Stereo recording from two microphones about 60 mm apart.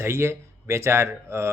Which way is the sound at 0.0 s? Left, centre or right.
Right.